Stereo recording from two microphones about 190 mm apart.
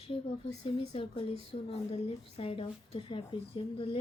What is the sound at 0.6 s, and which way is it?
A child's voice, 30° left (ahead or behind).